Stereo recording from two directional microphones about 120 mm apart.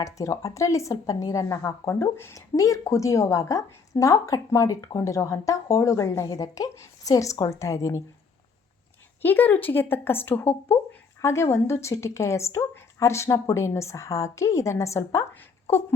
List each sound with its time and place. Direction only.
0.0 s a woman's voice: 25° left (ahead or behind)
9.2 s a woman's voice: 15° left (ahead or behind)